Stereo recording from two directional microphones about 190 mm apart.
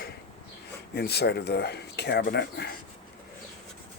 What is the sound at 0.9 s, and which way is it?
Speech, 60° left (ahead or behind).